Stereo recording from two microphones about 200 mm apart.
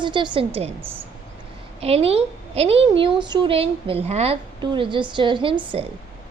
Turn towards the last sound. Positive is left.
turn(degrees=-25)  # may be behind; listen again after turning